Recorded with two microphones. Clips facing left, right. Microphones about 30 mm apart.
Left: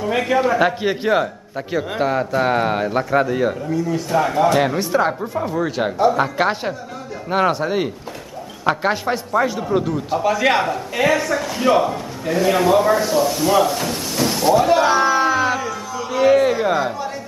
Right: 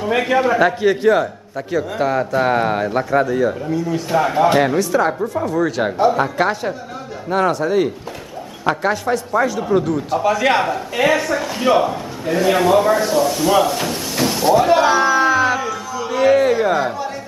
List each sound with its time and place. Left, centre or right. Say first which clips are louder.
0.0 s speech: right 2 dB; centre
0.7 s a man's voice: right 4 dB; centre
3.3 s speech: right 2 dB; left
3.7 s speech: right 1 dB; centre
4.7 s speech: right 2 dB; left
5.6 s a man's voice: right 3 dB; centre
5.9 s a man's voice: left 1 dB; centre
6.2 s a man's voice: right 1 dB; centre
9.6 s a man's voice: right 3 dB; centre
14.9 s a sound: right 2 dB; centre